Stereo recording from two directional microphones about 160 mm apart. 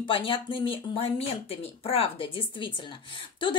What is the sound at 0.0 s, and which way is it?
A woman's voice, 30° left (ahead or behind).